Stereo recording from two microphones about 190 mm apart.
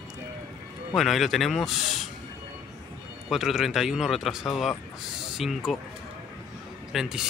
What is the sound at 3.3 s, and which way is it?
Speech, centre (ahead or behind).